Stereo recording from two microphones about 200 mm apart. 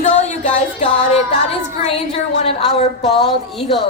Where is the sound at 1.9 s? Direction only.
30° left (ahead or behind).